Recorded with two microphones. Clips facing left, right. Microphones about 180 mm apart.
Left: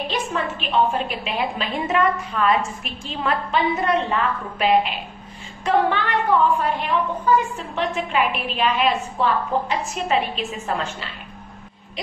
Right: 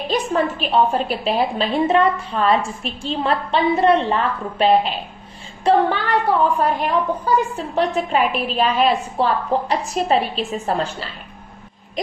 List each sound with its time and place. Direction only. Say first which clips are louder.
0.1 s a woman's voice: right 6 dB; 35° right (ahead or behind)